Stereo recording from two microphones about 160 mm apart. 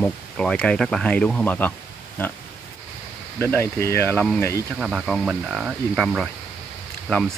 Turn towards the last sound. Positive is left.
turn(degrees=5)  # may be behind; listen again after turning